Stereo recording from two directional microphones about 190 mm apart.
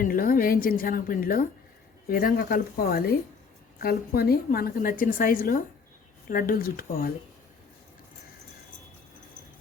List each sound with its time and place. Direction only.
0.0 s a woman's voice: 50° left (ahead or behind)